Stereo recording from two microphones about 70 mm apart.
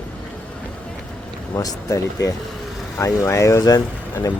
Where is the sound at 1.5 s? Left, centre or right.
Left.